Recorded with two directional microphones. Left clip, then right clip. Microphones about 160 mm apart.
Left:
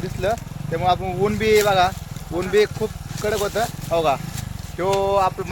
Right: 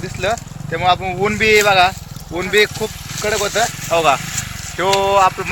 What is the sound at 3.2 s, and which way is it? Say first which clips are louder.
Speech: right 5 dB; 15° right (ahead or behind).